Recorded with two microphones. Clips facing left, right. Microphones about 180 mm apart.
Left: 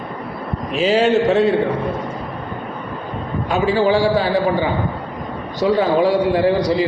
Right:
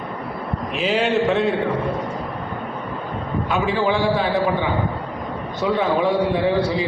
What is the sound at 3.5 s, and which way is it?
Speech, 35° left (ahead or behind).